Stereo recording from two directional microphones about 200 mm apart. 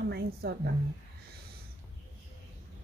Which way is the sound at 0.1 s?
50° right (ahead or behind).